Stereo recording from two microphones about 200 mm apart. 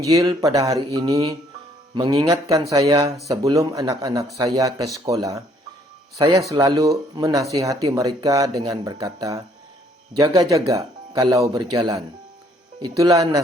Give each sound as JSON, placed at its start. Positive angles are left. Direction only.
{"t": 0.0, "sound": "speech", "side_deg": -15}